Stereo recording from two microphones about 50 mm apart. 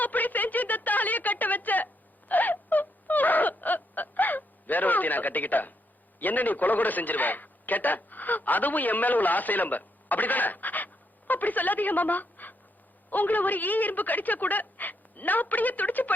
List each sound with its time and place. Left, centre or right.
0.0 s a sound: left
2.3 s wail: left
6.1 s a man's voice: left